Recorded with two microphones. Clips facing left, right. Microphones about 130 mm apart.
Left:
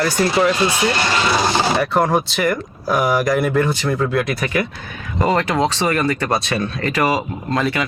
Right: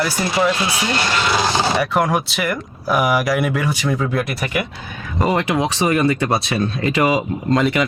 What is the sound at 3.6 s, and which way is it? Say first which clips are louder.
Speech: left 1 dB; 10° right (ahead or behind).